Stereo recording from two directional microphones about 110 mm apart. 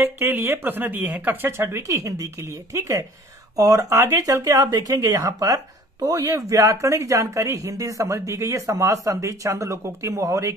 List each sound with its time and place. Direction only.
0.0 s speech: 20° right (ahead or behind)